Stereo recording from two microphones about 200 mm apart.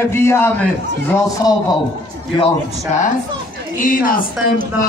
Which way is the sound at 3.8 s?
45° left (ahead or behind).